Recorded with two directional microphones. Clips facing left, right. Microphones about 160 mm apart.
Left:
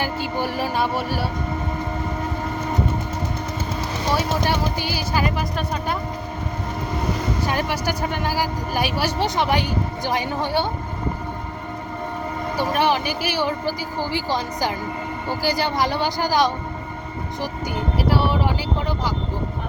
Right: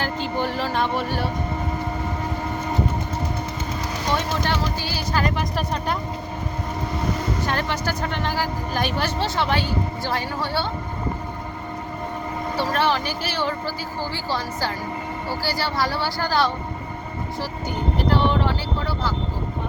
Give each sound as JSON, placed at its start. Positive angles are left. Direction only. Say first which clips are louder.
{"t": 0.0, "sound": "speech", "louder": "even", "side_deg": 10}
{"t": 4.1, "sound": "speech", "louder": "left 2 dB", "side_deg": 10}
{"t": 7.4, "sound": "speech", "louder": "left 3 dB", "side_deg": 10}
{"t": 12.5, "sound": "speech", "louder": "left 2 dB", "side_deg": 15}
{"t": 17.9, "sound": "speech", "louder": "even", "side_deg": 5}